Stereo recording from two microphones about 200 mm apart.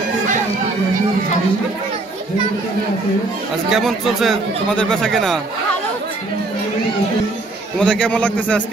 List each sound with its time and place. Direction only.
3.7 s speech: centre (ahead or behind)
7.8 s speech: 5° left (ahead or behind)